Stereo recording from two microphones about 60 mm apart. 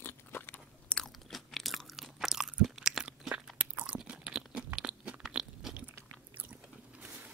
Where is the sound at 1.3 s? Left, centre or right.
Centre.